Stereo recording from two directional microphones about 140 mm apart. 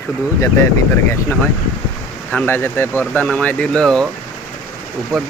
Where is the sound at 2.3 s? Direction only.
15° left (ahead or behind).